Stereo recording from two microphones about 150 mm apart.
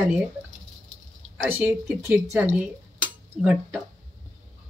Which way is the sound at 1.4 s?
5° right (ahead or behind).